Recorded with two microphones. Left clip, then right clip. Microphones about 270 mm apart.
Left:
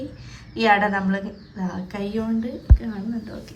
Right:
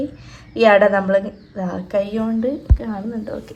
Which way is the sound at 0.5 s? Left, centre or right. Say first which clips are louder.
Right 6 dB; centre.